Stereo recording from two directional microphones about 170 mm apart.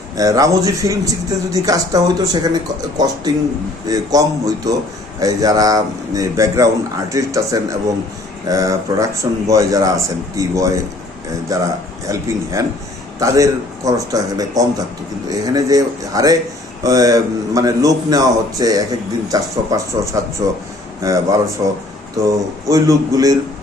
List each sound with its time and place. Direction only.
0.2 s speech: 20° right (ahead or behind)